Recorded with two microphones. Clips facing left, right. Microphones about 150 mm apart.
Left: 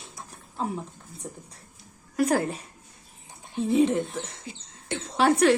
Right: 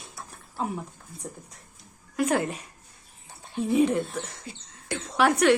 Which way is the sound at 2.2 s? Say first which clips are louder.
Left 1 dB; 35° left (ahead or behind).